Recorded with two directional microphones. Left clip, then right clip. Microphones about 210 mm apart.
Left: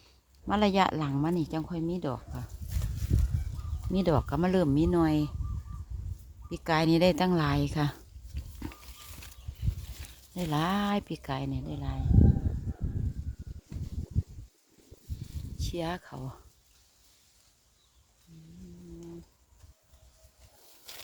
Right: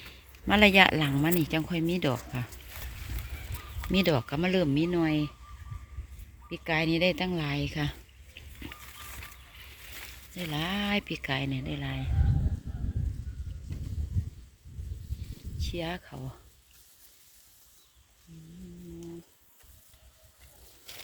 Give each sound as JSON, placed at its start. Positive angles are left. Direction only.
{"t": 0.4, "sound": "speech", "side_deg": 5}
{"t": 3.9, "sound": "speech", "side_deg": 15}
{"t": 6.5, "sound": "speech", "side_deg": 25}
{"t": 10.3, "sound": "speech", "side_deg": 25}
{"t": 15.5, "sound": "speech", "side_deg": 25}
{"t": 20.9, "sound": "a sound", "side_deg": 40}